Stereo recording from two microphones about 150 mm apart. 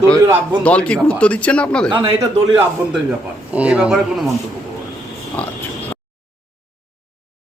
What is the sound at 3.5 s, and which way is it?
Speech, 10° right (ahead or behind).